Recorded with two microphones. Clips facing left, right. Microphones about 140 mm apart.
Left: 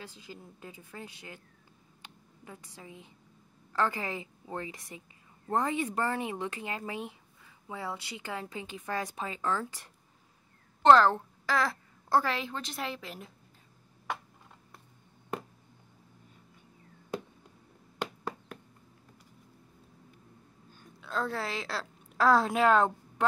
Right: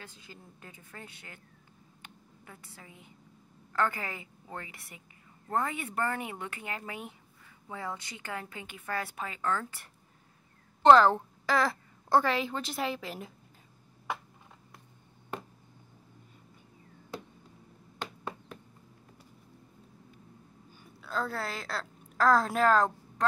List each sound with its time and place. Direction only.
0.0 s a woman's voice: 15° left (ahead or behind)
2.4 s a woman's voice: 15° left (ahead or behind)
10.8 s a child's voice: centre (ahead or behind)
20.8 s a woman's voice: centre (ahead or behind)